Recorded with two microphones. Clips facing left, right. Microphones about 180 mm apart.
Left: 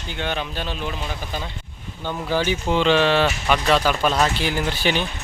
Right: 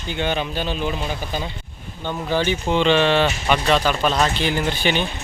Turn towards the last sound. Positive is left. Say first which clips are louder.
# right 1 dB
turn(degrees=0)  # may be behind; listen again after turning